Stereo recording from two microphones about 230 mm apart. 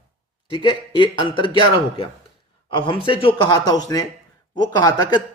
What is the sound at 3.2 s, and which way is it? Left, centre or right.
A man's voice, centre.